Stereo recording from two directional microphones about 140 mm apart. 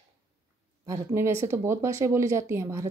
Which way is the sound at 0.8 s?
20° right (ahead or behind).